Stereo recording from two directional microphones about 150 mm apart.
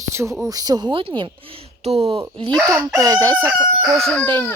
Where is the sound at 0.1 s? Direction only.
20° right (ahead or behind).